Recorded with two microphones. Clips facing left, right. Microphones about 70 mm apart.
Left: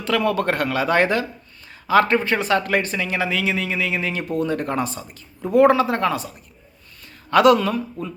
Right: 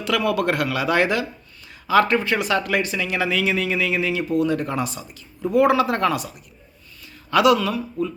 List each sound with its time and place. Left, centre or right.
0.0 s a man's voice: left
4.1 s a man's voice: left
5.8 s speech: left
7.0 s speech: left